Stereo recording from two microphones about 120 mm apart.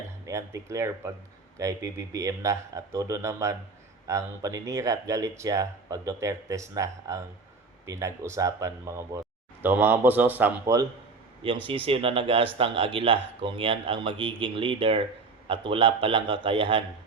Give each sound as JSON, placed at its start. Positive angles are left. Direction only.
{"t": 0.3, "sound": "speech", "side_deg": -25}
{"t": 11.4, "sound": "speech", "side_deg": -45}